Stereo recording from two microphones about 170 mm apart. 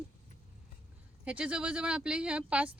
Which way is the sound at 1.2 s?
5° right (ahead or behind).